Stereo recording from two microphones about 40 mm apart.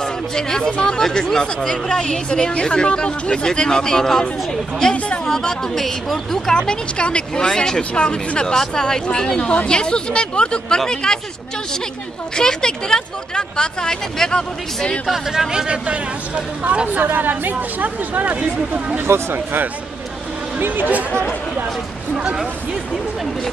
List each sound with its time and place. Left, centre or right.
0.0 s speech: centre
12.4 s speech: centre
15.3 s speech: centre
16.6 s speech: right
19.0 s speech: right
20.5 s speech: right